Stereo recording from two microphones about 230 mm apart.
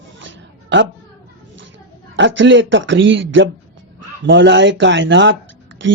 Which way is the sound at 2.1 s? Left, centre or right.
Right.